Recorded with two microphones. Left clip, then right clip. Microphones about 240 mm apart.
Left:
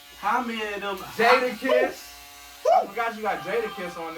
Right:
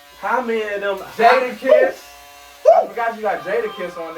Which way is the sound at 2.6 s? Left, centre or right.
Centre.